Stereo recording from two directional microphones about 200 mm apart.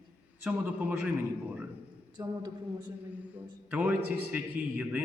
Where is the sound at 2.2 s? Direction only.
20° right (ahead or behind).